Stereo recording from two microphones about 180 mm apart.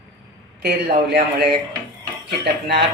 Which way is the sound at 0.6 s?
65° right (ahead or behind).